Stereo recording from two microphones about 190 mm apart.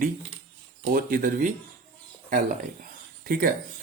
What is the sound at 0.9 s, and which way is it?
Speech, 50° right (ahead or behind).